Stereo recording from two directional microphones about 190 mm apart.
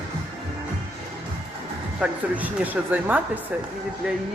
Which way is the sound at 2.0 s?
10° right (ahead or behind).